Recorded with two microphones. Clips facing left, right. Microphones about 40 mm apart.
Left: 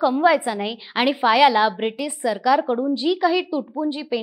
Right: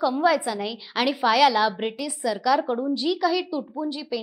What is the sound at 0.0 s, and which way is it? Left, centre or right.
Speech, left.